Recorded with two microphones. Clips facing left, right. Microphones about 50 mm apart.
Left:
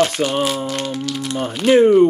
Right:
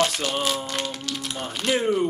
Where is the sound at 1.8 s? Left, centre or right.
Left.